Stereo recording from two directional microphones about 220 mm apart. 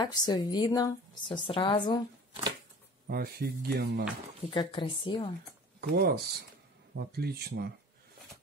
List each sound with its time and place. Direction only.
0.0 s a woman's voice: 20° left (ahead or behind)
3.1 s speech: 45° right (ahead or behind)
4.6 s a woman's voice: 20° left (ahead or behind)
5.8 s speech: 45° right (ahead or behind)